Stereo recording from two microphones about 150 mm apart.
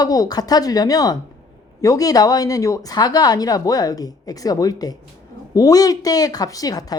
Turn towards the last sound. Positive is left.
turn(degrees=25)  # may be behind; listen again after turning